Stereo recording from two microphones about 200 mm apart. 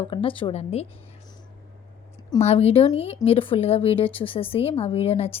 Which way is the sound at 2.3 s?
30° left (ahead or behind).